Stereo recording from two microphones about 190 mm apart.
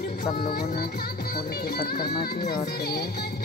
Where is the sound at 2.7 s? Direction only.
55° left (ahead or behind).